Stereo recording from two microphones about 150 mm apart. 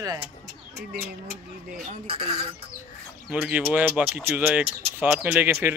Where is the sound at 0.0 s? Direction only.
25° right (ahead or behind).